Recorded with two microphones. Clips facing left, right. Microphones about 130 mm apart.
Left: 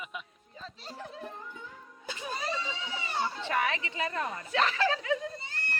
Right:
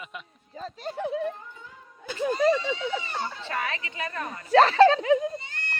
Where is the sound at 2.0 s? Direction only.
50° right (ahead or behind).